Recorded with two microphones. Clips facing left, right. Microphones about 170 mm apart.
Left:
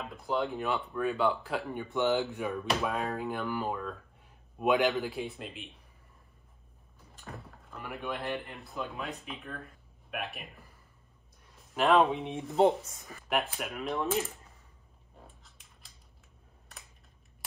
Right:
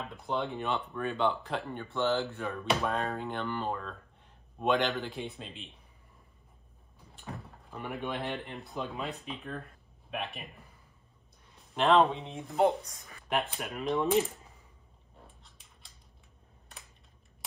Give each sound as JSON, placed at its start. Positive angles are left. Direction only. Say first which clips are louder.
{"t": 0.1, "sound": "speech", "louder": "left 3 dB", "side_deg": 0}
{"t": 2.6, "sound": "speech", "louder": "right 3 dB", "side_deg": 0}
{"t": 7.3, "sound": "speech", "louder": "right 2 dB", "side_deg": 0}
{"t": 11.5, "sound": "a sound", "louder": "even", "side_deg": 0}
{"t": 12.1, "sound": "speech", "louder": "left 4 dB", "side_deg": 20}
{"t": 12.6, "sound": "speech", "louder": "left 2 dB", "side_deg": 30}
{"t": 13.3, "sound": "speech", "louder": "even", "side_deg": 0}